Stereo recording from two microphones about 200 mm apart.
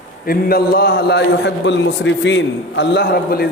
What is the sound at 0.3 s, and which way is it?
A man's voice, 50° left (ahead or behind).